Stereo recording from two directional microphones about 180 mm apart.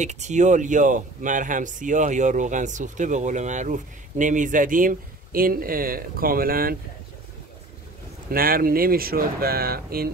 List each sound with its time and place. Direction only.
0.0 s speech: 40° right (ahead or behind)
8.3 s speech: 55° right (ahead or behind)